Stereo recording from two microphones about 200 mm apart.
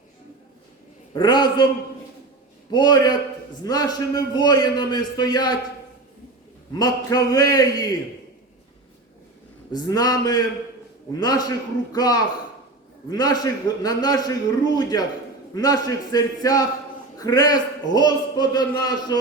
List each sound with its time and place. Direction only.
1.1 s a man's voice: 20° left (ahead or behind)
2.7 s a man's voice: 20° left (ahead or behind)
6.7 s a man's voice: 20° left (ahead or behind)
9.7 s a man's voice: 20° left (ahead or behind)